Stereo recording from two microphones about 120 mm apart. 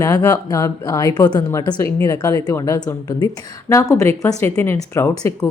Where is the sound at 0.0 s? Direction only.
25° left (ahead or behind).